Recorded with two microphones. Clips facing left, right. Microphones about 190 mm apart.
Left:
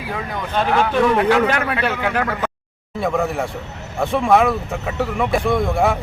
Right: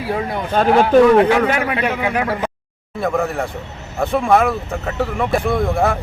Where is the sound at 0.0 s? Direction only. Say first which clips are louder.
Right 5 dB; 35° right (ahead or behind).